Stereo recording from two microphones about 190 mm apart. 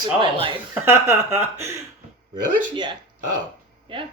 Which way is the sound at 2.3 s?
25° right (ahead or behind).